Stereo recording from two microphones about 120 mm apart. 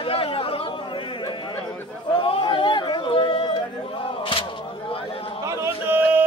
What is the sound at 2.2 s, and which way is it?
Chatter, 45° left (ahead or behind).